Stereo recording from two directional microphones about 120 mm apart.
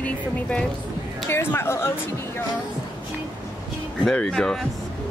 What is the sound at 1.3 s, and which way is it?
Speech, 20° left (ahead or behind).